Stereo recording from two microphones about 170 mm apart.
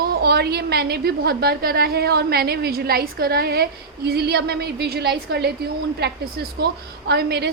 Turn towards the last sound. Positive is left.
turn(degrees=-70)  # may be behind; listen again after turning